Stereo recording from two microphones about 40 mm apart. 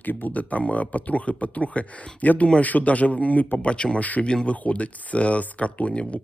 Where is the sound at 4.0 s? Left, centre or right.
Left.